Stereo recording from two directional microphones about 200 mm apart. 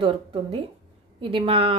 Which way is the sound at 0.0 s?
30° right (ahead or behind).